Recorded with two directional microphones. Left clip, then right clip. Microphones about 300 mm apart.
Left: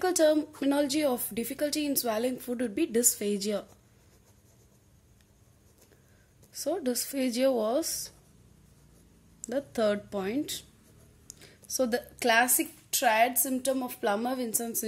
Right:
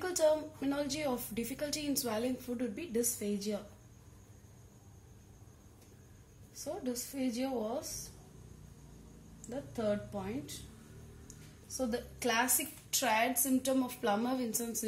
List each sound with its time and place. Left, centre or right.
0.0 s a woman's voice: left
6.5 s a woman's voice: left
9.5 s a woman's voice: left
11.6 s a woman's voice: left